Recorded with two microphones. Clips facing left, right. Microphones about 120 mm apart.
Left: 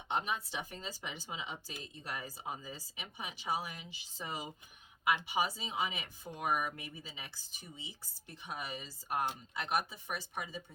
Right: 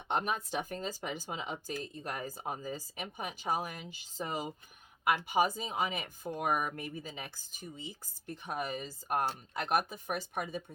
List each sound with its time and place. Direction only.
0.1 s speech: 50° right (ahead or behind)